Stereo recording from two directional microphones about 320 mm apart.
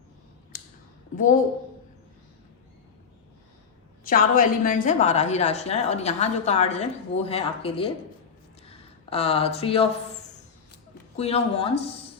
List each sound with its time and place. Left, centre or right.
1.1 s a woman's voice: left
4.0 s a woman's voice: left
11.2 s a woman's voice: centre